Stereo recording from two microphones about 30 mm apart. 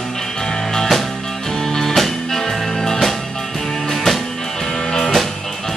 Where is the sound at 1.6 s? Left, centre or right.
Centre.